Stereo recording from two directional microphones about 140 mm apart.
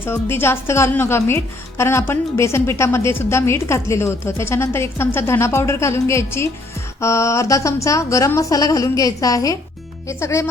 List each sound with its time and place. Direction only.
0.0 s a woman's voice: 15° left (ahead or behind)